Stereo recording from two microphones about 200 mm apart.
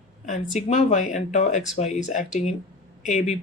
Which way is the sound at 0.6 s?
35° left (ahead or behind).